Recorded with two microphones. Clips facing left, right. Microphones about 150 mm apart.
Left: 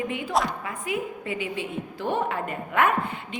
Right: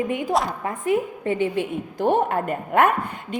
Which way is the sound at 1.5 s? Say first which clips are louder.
Right 5 dB; 50° right (ahead or behind).